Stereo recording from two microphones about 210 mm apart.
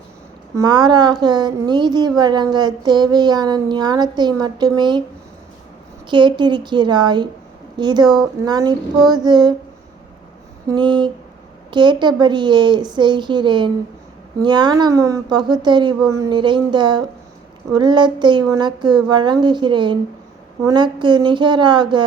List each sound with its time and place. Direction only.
0.5 s speech: 20° right (ahead or behind)
6.1 s speech: 20° right (ahead or behind)
10.7 s speech: 20° right (ahead or behind)